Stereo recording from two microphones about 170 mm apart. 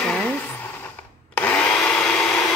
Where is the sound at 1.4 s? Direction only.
10° left (ahead or behind).